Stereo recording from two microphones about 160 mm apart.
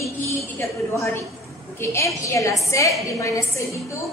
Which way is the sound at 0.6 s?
20° left (ahead or behind).